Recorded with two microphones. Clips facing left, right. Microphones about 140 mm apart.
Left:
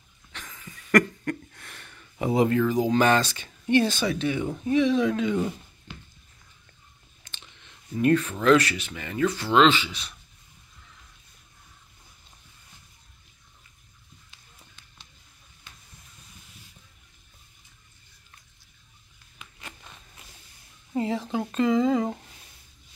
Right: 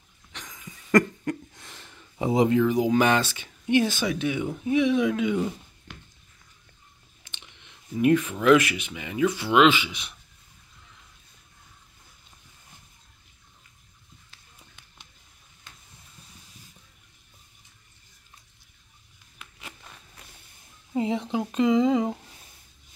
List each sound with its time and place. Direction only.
0.3 s a sound: 15° right (ahead or behind)
4.0 s speech: 10° right (ahead or behind)
7.2 s chewing: 15° right (ahead or behind)
7.9 s speech: 15° right (ahead or behind)
19.3 s a sound: 5° right (ahead or behind)
20.9 s speech: 20° right (ahead or behind)